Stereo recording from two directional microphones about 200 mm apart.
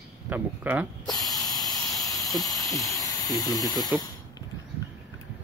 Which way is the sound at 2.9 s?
20° left (ahead or behind).